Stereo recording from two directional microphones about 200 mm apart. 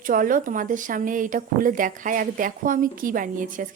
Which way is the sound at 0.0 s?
45° right (ahead or behind).